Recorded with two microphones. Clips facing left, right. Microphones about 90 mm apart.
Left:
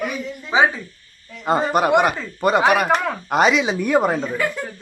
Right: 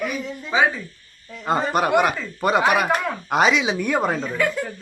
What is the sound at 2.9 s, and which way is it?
Speech, 40° left (ahead or behind).